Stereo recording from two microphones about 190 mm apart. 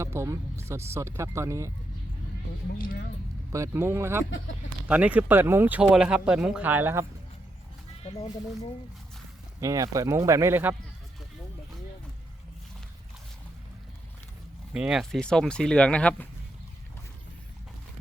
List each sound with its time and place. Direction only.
0.0 s speech: 15° right (ahead or behind)
2.7 s speech: 50° left (ahead or behind)
3.5 s speech: 15° right (ahead or behind)
8.0 s speech: 35° left (ahead or behind)
9.6 s speech: 15° right (ahead or behind)
14.7 s speech: 5° right (ahead or behind)